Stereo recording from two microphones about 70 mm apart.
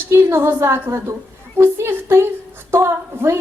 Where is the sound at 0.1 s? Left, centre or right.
Right.